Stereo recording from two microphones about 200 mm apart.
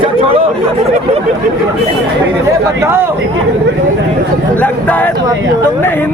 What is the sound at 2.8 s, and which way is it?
Speech, 10° right (ahead or behind).